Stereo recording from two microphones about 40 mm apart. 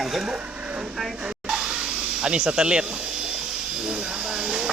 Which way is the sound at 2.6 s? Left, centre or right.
Right.